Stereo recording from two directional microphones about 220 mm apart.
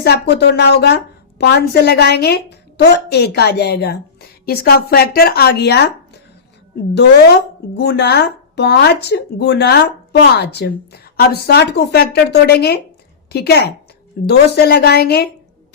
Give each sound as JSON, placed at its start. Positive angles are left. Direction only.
{"t": 0.0, "sound": "a woman's voice", "side_deg": 50}
{"t": 7.8, "sound": "a woman's voice", "side_deg": 50}